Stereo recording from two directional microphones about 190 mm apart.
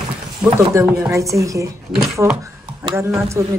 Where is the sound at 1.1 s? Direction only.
15° right (ahead or behind).